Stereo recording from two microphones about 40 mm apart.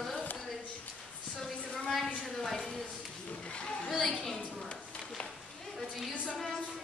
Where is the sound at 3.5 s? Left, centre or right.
Left.